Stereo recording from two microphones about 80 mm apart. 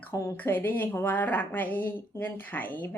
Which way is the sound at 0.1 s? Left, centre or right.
Left.